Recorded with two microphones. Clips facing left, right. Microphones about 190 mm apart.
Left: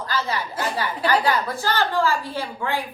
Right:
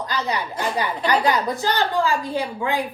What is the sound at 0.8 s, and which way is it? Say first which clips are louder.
A woman's voice: right 1 dB; 20° right (ahead or behind).